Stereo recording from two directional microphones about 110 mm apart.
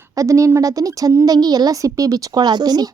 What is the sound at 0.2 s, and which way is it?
Speech, 30° right (ahead or behind).